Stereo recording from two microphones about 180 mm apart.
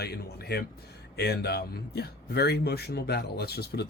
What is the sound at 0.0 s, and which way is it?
Speech, 60° left (ahead or behind).